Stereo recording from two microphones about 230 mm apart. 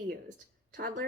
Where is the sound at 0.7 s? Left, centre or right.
Right.